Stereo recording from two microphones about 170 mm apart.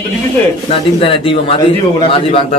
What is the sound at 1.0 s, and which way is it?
A man's voice, 30° left (ahead or behind).